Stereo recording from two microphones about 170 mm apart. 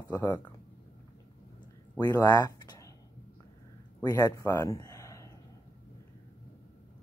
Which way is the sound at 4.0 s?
20° left (ahead or behind).